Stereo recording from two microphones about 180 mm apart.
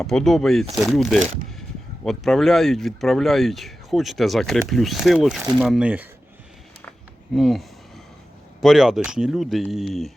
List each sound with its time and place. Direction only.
0.0 s speech: centre (ahead or behind)
7.3 s speech: centre (ahead or behind)